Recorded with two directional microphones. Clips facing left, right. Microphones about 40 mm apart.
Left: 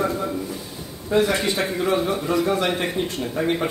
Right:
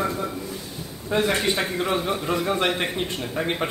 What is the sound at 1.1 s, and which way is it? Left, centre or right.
Speech, right.